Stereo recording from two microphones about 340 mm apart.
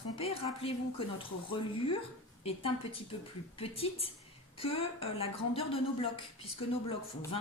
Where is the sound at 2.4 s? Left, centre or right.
Centre.